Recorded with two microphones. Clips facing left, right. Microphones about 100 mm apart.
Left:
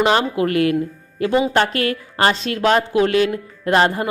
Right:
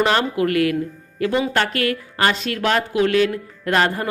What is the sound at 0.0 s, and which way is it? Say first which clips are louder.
Speech: left 2 dB; 20° left (ahead or behind).